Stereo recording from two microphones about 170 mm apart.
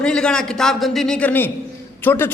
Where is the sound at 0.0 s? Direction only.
5° left (ahead or behind).